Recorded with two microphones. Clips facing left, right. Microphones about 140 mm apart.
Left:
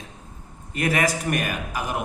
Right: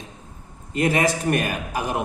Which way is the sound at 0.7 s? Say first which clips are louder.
Right 3 dB; 25° right (ahead or behind).